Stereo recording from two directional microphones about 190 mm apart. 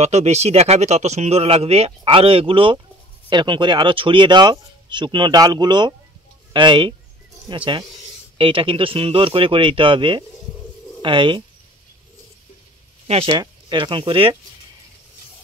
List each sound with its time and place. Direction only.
0.0 s speech: 35° right (ahead or behind)
13.0 s speech: 30° right (ahead or behind)